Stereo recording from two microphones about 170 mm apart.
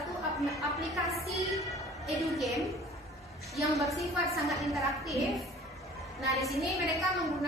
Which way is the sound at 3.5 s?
Centre (ahead or behind).